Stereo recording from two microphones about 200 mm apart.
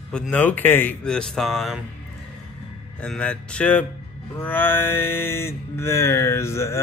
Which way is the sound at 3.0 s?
5° left (ahead or behind).